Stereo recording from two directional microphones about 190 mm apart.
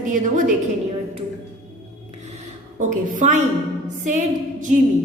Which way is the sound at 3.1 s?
40° right (ahead or behind).